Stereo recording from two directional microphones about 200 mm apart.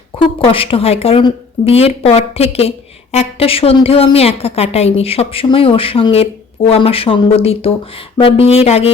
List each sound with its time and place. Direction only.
0.2 s speech: 25° left (ahead or behind)